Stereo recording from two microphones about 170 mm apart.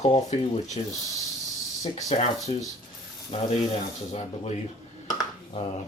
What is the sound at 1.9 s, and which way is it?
Speech, 40° left (ahead or behind).